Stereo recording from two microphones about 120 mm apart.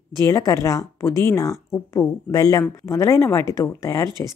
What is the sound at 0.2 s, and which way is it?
Speech, 30° left (ahead or behind).